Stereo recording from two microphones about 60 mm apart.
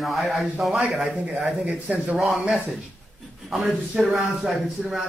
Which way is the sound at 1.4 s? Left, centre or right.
Centre.